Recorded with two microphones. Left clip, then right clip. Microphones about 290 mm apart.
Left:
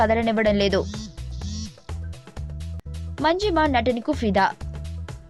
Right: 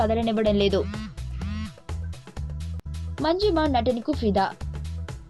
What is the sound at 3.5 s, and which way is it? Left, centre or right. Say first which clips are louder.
Speech: left 2 dB; left.